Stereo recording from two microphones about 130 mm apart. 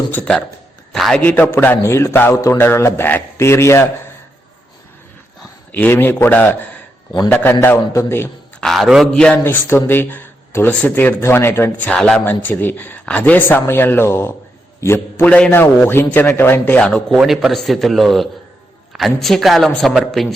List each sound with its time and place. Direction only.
0.1 s a man's voice: 10° left (ahead or behind)
1.2 s a man's voice: 15° left (ahead or behind)
5.7 s speech: 15° left (ahead or behind)
8.6 s a man's voice: centre (ahead or behind)
9.4 s speech: 15° left (ahead or behind)
11.9 s a man's voice: 5° left (ahead or behind)
17.2 s a man's voice: centre (ahead or behind)